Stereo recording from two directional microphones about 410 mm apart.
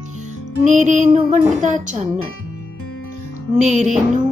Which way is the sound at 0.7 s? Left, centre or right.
Centre.